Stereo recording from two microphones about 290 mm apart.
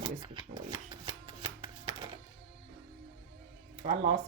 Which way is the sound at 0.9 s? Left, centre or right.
Centre.